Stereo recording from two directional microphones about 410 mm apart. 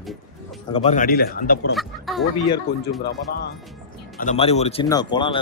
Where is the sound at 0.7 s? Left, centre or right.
Centre.